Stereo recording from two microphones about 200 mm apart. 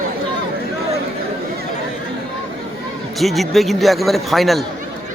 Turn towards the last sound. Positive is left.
turn(degrees=0)  # may be behind; listen again after turning